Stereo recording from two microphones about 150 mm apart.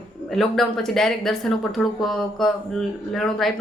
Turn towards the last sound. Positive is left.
turn(degrees=0)  # may be behind; listen again after turning